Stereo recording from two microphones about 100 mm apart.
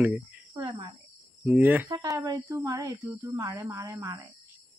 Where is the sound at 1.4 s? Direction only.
15° right (ahead or behind).